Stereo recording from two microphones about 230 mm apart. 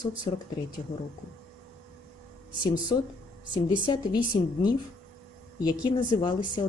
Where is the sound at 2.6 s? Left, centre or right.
Centre.